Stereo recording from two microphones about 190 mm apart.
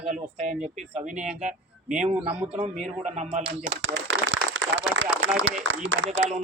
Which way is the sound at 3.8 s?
80° right.